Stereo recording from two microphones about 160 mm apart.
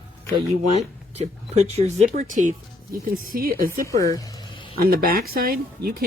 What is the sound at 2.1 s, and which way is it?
A woman's voice, 55° right (ahead or behind).